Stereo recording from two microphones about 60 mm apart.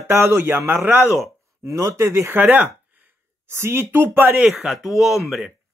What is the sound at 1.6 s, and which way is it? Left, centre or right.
Speech, right.